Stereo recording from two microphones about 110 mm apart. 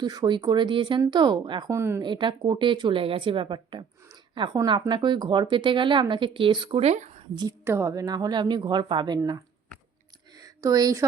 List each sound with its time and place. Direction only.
0.0 s a woman's voice: 40° right (ahead or behind)
1.7 s a woman's voice: 25° right (ahead or behind)
2.0 s speech: 45° right (ahead or behind)
6.8 s speech: 90° right
7.6 s a woman's voice: 25° right (ahead or behind)
10.3 s a sound: 35° right (ahead or behind)